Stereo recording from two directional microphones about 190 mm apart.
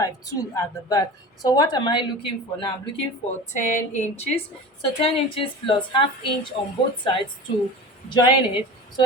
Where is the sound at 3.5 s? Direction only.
40° left (ahead or behind).